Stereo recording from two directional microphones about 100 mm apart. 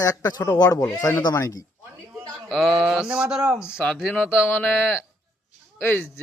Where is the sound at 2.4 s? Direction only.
Centre (ahead or behind).